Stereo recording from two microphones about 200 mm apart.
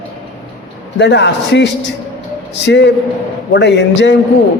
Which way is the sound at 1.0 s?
60° left (ahead or behind).